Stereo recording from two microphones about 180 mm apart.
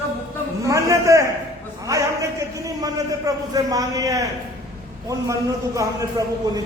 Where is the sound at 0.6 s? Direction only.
20° right (ahead or behind).